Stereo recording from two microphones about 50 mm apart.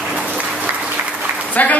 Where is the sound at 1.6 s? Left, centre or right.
Left.